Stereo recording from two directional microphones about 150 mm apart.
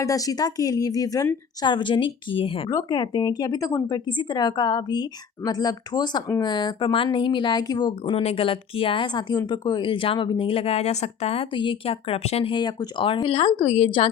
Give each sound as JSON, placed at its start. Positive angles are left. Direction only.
{"t": 0.0, "sound": "speech", "side_deg": 20}
{"t": 2.6, "sound": "speech", "side_deg": 25}
{"t": 8.2, "sound": "speech", "side_deg": 40}